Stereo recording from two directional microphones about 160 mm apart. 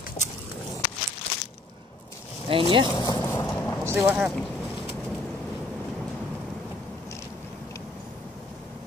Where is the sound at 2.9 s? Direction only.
30° left (ahead or behind).